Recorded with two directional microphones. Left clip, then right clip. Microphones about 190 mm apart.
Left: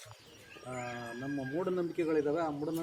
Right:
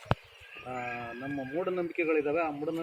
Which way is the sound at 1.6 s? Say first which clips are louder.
Right 3 dB; 25° left (ahead or behind).